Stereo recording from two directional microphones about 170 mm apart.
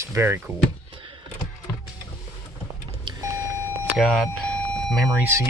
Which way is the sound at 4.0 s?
Centre (ahead or behind).